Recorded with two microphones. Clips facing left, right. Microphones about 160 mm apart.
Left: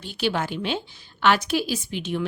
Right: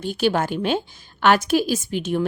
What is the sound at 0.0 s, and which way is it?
A woman's voice, 45° right (ahead or behind).